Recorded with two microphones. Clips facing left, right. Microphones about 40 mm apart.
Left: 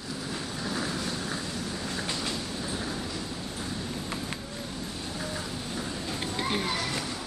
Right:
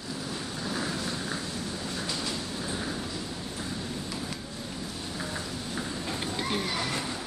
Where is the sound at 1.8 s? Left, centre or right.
Left.